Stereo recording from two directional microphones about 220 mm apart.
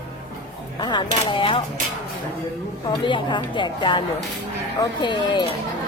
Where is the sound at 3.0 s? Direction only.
20° left (ahead or behind).